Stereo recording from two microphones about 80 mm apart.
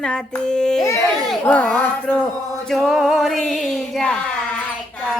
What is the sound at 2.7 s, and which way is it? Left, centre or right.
Music, centre.